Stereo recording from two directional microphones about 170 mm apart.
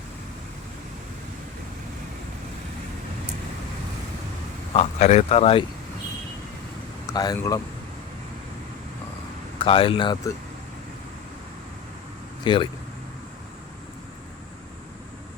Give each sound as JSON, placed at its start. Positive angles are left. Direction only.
{"t": 4.7, "sound": "speech", "side_deg": 40}
{"t": 7.1, "sound": "speech", "side_deg": 20}
{"t": 9.6, "sound": "speech", "side_deg": 30}
{"t": 12.4, "sound": "speech", "side_deg": 25}